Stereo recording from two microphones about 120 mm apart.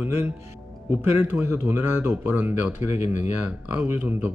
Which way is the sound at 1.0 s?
15° right (ahead or behind).